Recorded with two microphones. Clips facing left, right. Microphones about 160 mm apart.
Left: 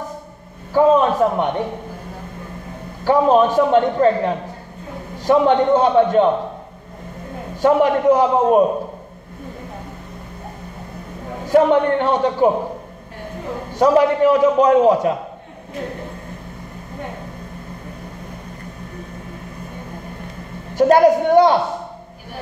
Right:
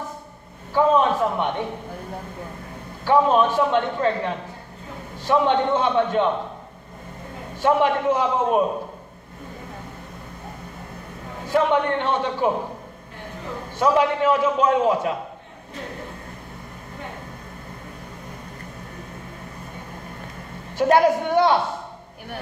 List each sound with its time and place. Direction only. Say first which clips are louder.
0.7 s a sound: left 5 dB; 40° left (ahead or behind)
3.1 s a man's voice: left 4 dB; 40° left (ahead or behind)
7.6 s a man's voice: left 5 dB; 40° left (ahead or behind)
11.4 s a man's voice: left 6 dB; 40° left (ahead or behind)
13.7 s a man's voice: left 6 dB; 40° left (ahead or behind)
20.7 s a man's voice: left 5 dB; 40° left (ahead or behind)